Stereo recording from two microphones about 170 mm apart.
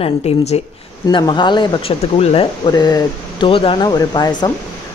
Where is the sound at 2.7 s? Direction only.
20° left (ahead or behind).